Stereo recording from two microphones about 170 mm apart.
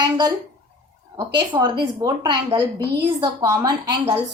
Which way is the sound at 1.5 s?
25° right (ahead or behind).